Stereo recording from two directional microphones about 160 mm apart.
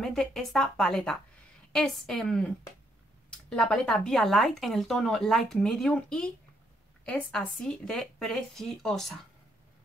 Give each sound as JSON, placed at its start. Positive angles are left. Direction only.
{"t": 0.0, "sound": "speech", "side_deg": 0}